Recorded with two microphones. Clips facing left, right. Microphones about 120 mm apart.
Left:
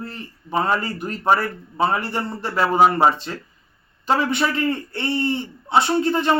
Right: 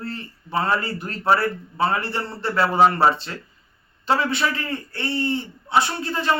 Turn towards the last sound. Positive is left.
turn(degrees=20)  # may be behind; listen again after turning